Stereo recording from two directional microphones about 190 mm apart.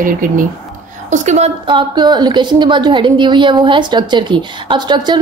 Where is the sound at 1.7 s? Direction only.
25° right (ahead or behind).